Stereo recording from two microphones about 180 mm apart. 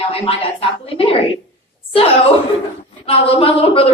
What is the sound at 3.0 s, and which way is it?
Speech, 30° left (ahead or behind).